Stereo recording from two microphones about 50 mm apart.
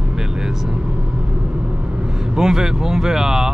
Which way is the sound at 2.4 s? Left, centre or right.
Centre.